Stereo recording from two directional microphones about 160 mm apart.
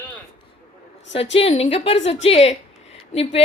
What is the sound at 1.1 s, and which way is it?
A woman's voice, 35° left (ahead or behind).